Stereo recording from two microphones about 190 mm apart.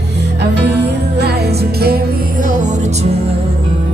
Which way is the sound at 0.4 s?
65° right (ahead or behind).